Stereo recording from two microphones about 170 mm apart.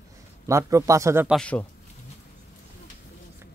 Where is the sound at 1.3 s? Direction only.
5° left (ahead or behind).